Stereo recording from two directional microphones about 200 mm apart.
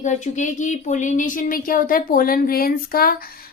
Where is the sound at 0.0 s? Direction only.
40° left (ahead or behind).